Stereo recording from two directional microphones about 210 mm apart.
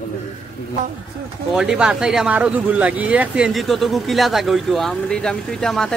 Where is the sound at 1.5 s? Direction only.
5° right (ahead or behind).